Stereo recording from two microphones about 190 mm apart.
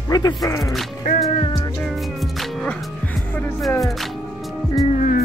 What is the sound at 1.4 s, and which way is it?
Music, 25° left (ahead or behind).